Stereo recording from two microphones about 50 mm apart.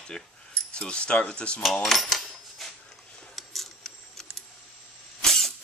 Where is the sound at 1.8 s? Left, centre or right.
Centre.